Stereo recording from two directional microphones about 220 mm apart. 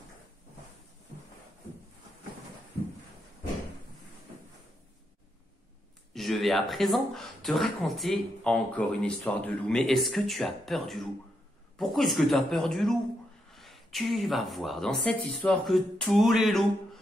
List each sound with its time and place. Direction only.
6.1 s speech: centre (ahead or behind)